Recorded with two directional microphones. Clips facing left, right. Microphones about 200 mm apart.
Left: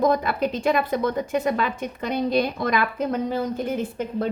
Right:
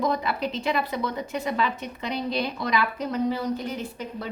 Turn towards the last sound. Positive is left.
turn(degrees=50)  # may be behind; listen again after turning